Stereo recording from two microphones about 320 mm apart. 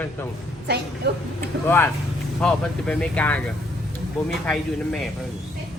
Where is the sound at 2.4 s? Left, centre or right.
Centre.